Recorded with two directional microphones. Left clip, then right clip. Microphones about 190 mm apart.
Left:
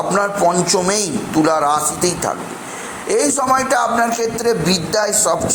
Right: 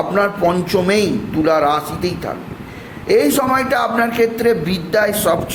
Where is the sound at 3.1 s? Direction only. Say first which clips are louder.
Right 2 dB; 20° right (ahead or behind).